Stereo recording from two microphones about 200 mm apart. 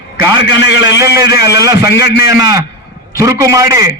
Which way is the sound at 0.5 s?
60° left (ahead or behind).